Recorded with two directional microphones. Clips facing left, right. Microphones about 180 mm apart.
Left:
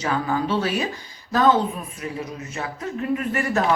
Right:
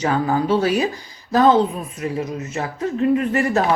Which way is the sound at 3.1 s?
35° right (ahead or behind).